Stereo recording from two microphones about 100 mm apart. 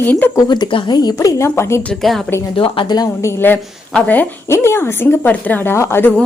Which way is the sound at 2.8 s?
45° left (ahead or behind).